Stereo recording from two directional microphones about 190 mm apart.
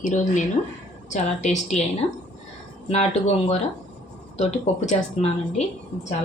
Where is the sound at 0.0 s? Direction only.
40° left (ahead or behind).